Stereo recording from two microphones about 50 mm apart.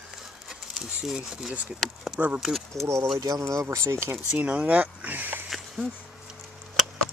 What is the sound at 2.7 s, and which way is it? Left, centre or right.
Speech, right.